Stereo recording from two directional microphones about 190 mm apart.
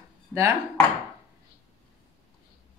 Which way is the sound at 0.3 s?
15° right (ahead or behind).